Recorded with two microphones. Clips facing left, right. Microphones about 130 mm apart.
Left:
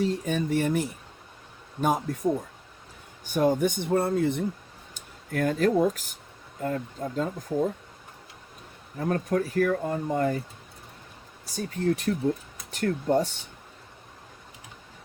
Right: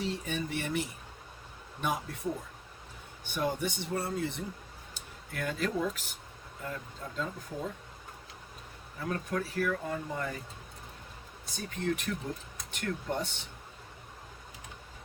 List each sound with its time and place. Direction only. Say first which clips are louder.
0.0 s speech: left 8 dB; 45° left (ahead or behind)
9.0 s speech: left 8 dB; 40° left (ahead or behind)
11.5 s speech: left 7 dB; 35° left (ahead or behind)